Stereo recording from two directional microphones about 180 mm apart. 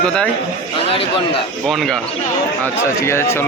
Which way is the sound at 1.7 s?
Centre (ahead or behind).